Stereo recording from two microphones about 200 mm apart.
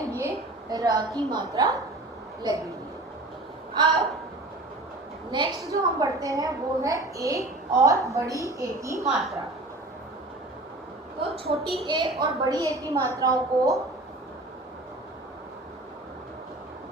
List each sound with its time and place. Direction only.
0.1 s a woman's voice: 15° right (ahead or behind)
5.3 s a woman's voice: 25° right (ahead or behind)
9.1 s a woman's voice: centre (ahead or behind)
11.2 s a woman's voice: 30° right (ahead or behind)
11.9 s a woman's voice: 20° right (ahead or behind)